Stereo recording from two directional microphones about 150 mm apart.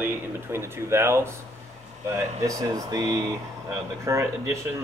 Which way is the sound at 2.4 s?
25° right (ahead or behind).